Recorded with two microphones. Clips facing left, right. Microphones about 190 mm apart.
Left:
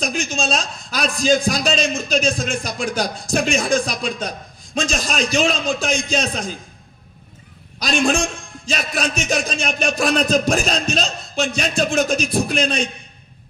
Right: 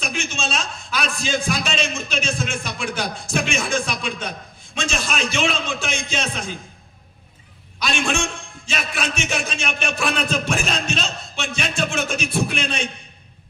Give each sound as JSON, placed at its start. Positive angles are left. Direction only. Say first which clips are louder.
{"t": 0.0, "sound": "a man's voice", "louder": "left 5 dB", "side_deg": 40}
{"t": 7.8, "sound": "a man's voice", "louder": "left 5 dB", "side_deg": 40}